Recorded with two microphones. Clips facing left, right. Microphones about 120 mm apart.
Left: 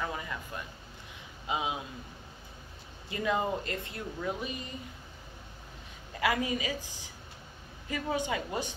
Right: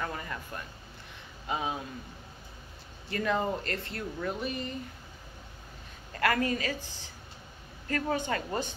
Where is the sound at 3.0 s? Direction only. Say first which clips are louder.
Right 1 dB; 15° left (ahead or behind).